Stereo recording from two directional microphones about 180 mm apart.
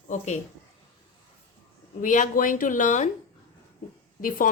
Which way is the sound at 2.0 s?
45° left (ahead or behind).